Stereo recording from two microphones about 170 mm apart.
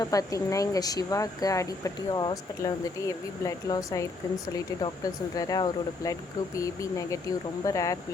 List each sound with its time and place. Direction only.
0.0 s speech: 20° left (ahead or behind)